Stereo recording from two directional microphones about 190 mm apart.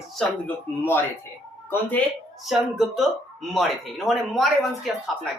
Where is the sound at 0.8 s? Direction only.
10° left (ahead or behind).